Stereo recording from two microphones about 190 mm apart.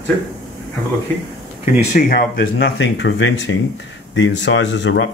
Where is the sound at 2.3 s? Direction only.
70° left (ahead or behind).